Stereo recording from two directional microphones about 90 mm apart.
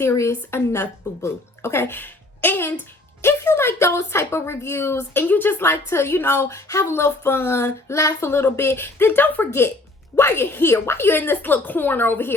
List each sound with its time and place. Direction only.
0.0 s speech: 35° left (ahead or behind)